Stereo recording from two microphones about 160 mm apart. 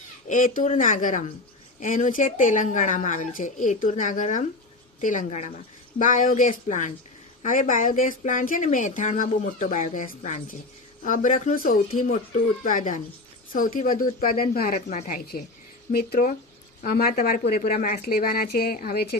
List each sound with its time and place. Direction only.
0.3 s speech: 55° left (ahead or behind)
15.9 s speech: 70° left (ahead or behind)